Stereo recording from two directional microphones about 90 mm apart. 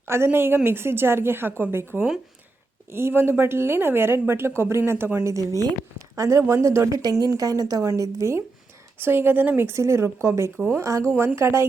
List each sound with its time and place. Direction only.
0.0 s a woman's voice: 25° right (ahead or behind)